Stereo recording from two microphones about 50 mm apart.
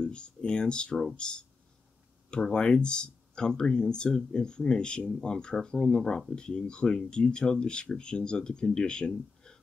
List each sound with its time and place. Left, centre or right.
0.0 s speech: centre